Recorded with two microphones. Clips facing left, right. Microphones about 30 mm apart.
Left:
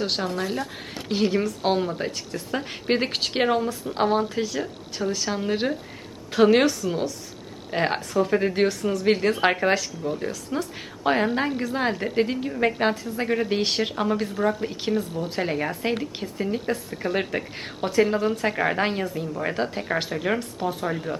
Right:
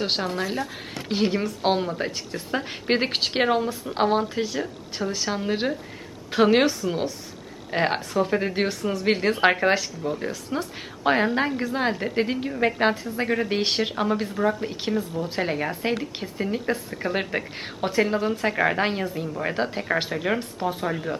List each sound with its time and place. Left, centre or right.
0.0 s a woman's voice: centre
20.4 s speech: right
20.8 s speech: centre